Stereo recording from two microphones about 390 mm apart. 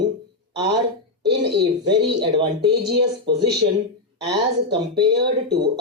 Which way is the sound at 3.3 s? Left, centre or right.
Right.